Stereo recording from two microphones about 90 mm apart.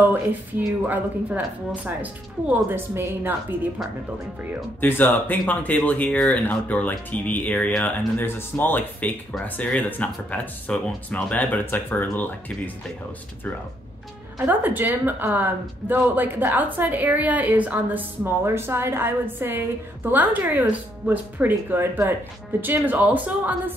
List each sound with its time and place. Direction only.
0.1 s a woman's voice: 20° right (ahead or behind)
4.7 s speech: 20° left (ahead or behind)
14.4 s a woman's voice: 20° right (ahead or behind)